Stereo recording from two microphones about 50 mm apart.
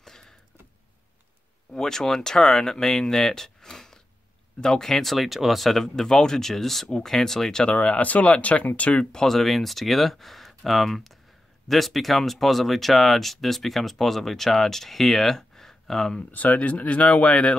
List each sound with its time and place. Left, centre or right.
0.0 s a sound: centre
1.7 s speech: centre
7.6 s speech: left
9.1 s speech: centre
16.2 s speech: left